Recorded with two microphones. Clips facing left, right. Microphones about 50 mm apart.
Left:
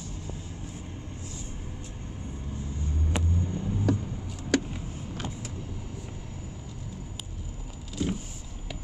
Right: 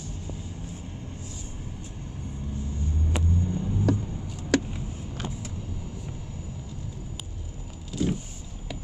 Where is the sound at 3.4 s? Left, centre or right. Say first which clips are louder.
Right 2 dB; centre.